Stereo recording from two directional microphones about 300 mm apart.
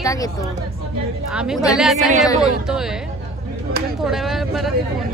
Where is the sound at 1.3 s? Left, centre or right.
Centre.